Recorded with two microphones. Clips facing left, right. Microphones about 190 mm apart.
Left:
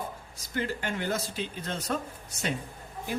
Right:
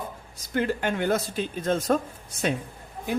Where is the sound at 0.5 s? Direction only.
55° right (ahead or behind).